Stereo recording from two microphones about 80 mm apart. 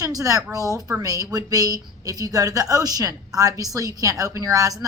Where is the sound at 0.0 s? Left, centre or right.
Right.